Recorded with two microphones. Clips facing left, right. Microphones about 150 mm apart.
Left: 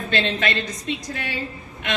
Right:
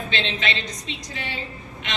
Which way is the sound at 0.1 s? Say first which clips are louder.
Left 6 dB; 50° left (ahead or behind).